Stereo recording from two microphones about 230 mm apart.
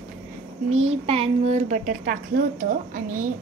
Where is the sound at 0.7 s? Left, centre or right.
Right.